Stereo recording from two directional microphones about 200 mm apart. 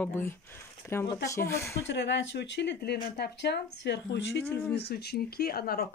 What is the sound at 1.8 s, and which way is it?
Speech, 60° left (ahead or behind).